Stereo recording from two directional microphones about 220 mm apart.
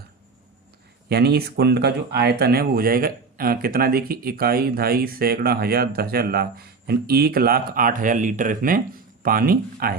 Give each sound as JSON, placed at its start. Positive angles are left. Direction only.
{"t": 1.1, "sound": "speech", "side_deg": -45}